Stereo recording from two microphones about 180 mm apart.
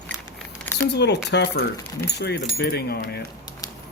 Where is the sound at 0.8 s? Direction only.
70° left (ahead or behind).